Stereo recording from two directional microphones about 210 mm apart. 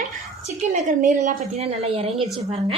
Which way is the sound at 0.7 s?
35° right (ahead or behind).